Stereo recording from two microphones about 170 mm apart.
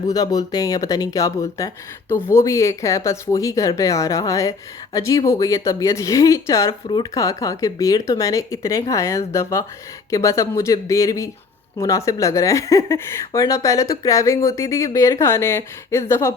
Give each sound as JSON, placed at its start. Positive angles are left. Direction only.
{"t": 0.1, "sound": "a woman's voice", "side_deg": 20}